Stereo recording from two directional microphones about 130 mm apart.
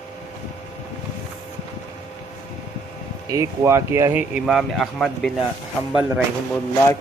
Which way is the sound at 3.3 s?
25° right (ahead or behind).